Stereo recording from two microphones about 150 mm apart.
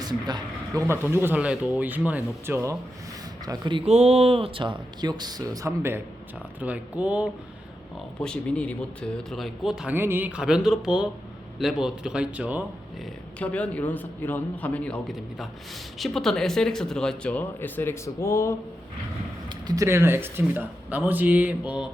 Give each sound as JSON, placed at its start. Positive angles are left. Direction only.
{"t": 0.0, "sound": "speech", "side_deg": -30}
{"t": 3.8, "sound": "speech", "side_deg": -45}
{"t": 8.2, "sound": "speech", "side_deg": 5}
{"t": 9.9, "sound": "speech", "side_deg": -15}
{"t": 13.4, "sound": "a man's voice", "side_deg": 10}
{"t": 19.6, "sound": "speech", "side_deg": -20}